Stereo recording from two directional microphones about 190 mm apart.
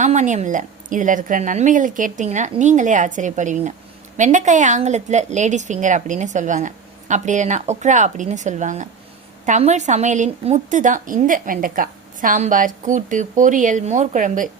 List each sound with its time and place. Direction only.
0.0 s a woman's voice: 40° right (ahead or behind)